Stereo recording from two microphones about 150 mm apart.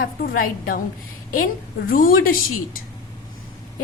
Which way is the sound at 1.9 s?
70° left (ahead or behind).